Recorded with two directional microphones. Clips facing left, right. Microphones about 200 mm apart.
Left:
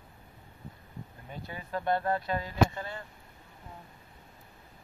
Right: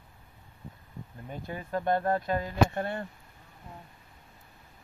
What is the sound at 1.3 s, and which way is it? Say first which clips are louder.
Speech: right 3 dB; 45° right (ahead or behind).